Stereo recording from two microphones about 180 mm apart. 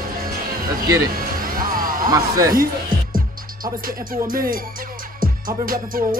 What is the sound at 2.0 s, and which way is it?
Speech, 20° right (ahead or behind).